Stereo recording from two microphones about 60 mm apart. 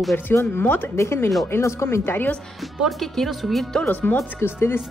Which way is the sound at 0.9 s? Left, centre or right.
Left.